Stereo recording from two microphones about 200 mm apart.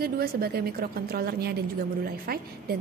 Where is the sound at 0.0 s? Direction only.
50° right (ahead or behind).